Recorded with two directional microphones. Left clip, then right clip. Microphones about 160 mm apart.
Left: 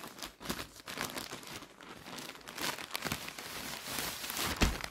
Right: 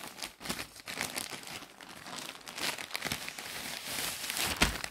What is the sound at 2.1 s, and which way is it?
Crumpling, centre (ahead or behind).